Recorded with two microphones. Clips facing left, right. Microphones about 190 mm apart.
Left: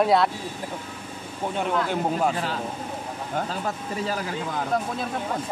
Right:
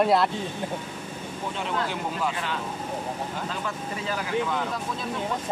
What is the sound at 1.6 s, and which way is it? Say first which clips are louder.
Speech: left 5 dB; 45° left (ahead or behind).